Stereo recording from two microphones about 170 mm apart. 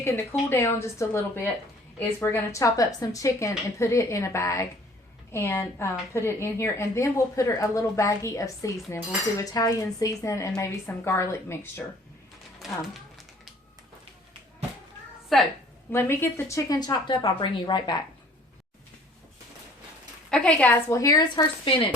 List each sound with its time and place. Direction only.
0.0 s a woman's voice: 15° left (ahead or behind)
12.5 s a sound: centre (ahead or behind)
15.3 s a woman's voice: centre (ahead or behind)
15.9 s a woman's voice: 15° left (ahead or behind)
20.3 s a woman's voice: 5° left (ahead or behind); by 21.8 s 30° left (ahead or behind)